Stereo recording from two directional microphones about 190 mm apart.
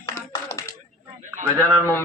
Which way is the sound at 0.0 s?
15° left (ahead or behind).